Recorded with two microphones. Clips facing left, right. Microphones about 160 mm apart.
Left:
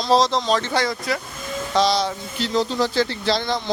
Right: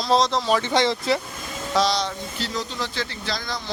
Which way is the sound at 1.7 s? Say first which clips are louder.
Left 3 dB; centre (ahead or behind).